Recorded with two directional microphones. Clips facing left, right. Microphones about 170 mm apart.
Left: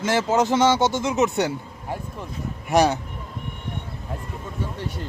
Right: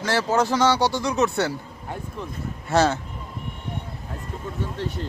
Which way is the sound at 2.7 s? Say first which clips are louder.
Left 1 dB; 15° left (ahead or behind).